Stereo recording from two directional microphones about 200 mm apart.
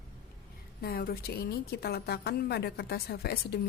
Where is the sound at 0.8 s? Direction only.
50° left (ahead or behind).